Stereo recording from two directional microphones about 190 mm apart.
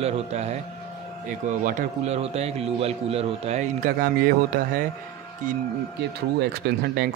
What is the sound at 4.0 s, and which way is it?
Speech, 50° right (ahead or behind).